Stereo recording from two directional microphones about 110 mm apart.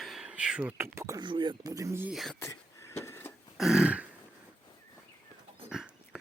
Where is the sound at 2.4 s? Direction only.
25° left (ahead or behind).